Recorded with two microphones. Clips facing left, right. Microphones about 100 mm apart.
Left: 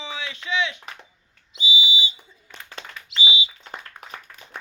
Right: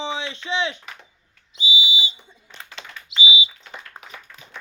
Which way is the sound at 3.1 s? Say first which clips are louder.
Right 2 dB; 15° right (ahead or behind).